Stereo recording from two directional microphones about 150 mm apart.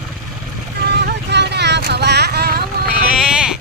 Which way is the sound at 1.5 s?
90° right.